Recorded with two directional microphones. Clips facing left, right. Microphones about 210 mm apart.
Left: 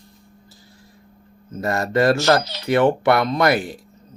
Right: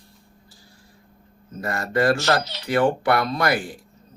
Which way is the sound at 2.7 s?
25° left (ahead or behind).